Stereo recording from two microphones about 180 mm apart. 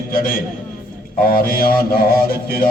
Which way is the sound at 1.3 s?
55° left (ahead or behind).